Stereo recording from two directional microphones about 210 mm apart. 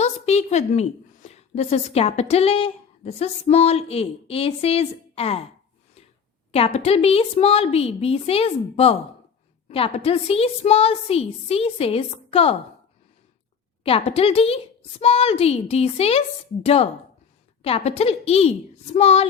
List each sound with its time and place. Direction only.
0.0 s a woman's voice: 30° left (ahead or behind)
6.5 s a woman's voice: 30° left (ahead or behind)
13.8 s a woman's voice: 25° left (ahead or behind)